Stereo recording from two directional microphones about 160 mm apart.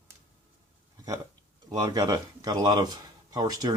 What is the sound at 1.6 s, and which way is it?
Speech, 25° right (ahead or behind).